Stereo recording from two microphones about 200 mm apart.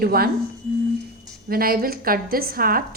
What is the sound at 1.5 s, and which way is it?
A woman's voice, 50° right (ahead or behind).